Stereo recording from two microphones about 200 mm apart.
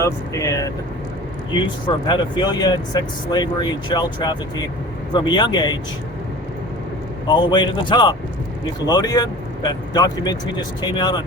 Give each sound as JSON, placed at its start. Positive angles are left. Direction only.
{"t": 0.0, "sound": "speech", "side_deg": 15}
{"t": 2.0, "sound": "speech", "side_deg": 20}
{"t": 7.3, "sound": "speech", "side_deg": 20}